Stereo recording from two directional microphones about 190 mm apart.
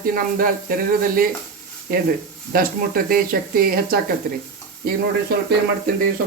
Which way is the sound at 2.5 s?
50° right (ahead or behind).